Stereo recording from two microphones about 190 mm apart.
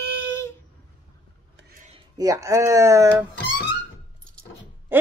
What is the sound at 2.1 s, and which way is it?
A man's voice, 15° right (ahead or behind).